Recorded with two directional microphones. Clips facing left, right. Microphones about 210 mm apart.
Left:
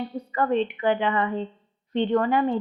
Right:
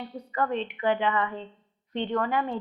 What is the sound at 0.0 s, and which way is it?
A woman's voice, 30° left (ahead or behind).